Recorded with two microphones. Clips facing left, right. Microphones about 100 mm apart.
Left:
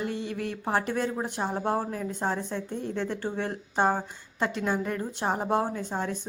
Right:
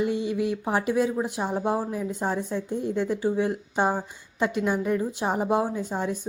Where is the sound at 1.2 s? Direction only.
10° right (ahead or behind).